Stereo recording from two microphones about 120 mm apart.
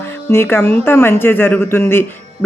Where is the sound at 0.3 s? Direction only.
20° left (ahead or behind).